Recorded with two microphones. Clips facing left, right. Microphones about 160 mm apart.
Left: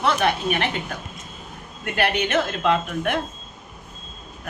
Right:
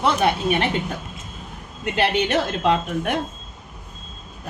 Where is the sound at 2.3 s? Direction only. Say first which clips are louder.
Right 1 dB; 35° right (ahead or behind).